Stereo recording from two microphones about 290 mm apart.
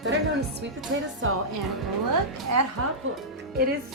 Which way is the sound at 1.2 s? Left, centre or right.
Right.